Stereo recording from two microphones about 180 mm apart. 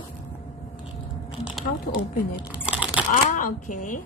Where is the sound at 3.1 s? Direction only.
45° left (ahead or behind).